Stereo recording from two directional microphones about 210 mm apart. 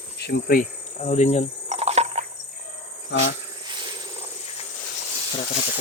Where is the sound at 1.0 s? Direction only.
30° left (ahead or behind).